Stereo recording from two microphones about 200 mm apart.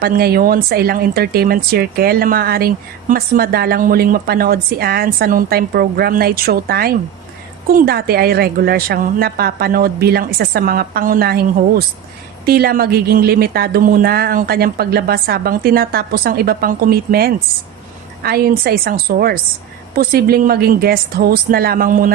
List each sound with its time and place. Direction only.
0.0 s speech: 50° right (ahead or behind)